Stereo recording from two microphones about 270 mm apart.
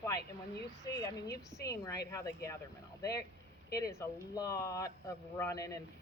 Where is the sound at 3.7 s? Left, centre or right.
Centre.